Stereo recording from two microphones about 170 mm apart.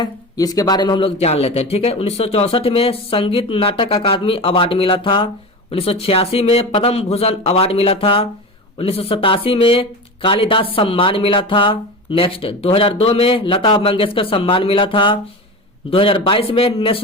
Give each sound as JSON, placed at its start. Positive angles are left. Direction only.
{"t": 0.0, "sound": "speech", "side_deg": 20}